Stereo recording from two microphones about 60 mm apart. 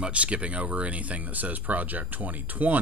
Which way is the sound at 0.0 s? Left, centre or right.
Centre.